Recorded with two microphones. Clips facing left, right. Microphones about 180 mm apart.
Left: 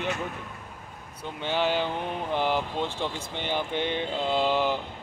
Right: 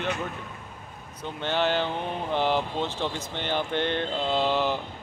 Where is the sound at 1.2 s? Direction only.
10° left (ahead or behind).